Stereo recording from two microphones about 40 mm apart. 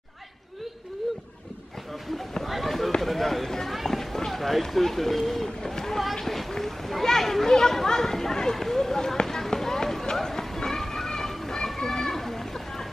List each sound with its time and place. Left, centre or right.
2.4 s run: centre
3.0 s a sound: centre
3.7 s run: centre